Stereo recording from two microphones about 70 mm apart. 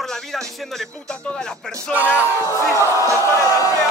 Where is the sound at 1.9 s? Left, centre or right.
Right.